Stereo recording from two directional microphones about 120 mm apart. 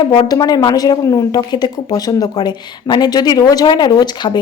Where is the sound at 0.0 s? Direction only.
40° left (ahead or behind).